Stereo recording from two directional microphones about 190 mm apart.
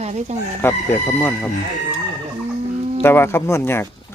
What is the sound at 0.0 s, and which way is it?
Speech, 35° right (ahead or behind).